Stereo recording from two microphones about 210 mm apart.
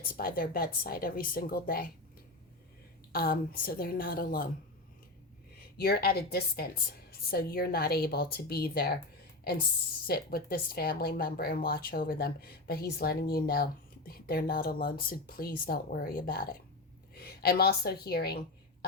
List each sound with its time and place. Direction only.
0.2 s a woman's voice: 45° left (ahead or behind)
3.1 s a woman's voice: 45° left (ahead or behind)
5.7 s a woman's voice: 50° left (ahead or behind)
10.1 s a woman's voice: 45° left (ahead or behind)